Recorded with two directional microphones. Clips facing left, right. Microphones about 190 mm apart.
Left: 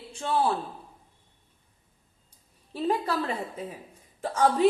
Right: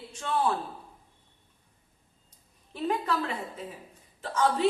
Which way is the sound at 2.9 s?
35° left (ahead or behind).